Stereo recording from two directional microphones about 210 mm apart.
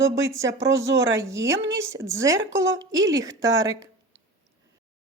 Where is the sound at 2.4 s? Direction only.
60° right (ahead or behind).